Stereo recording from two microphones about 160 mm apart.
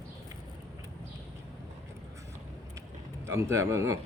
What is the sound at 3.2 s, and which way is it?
Speech, 15° right (ahead or behind).